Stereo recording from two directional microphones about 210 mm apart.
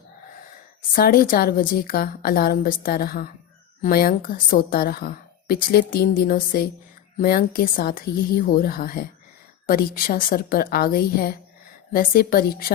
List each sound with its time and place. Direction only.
0.9 s a woman's voice: 45° left (ahead or behind)